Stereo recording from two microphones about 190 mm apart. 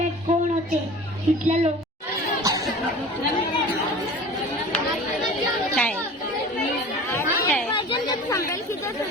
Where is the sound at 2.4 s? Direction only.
15° right (ahead or behind).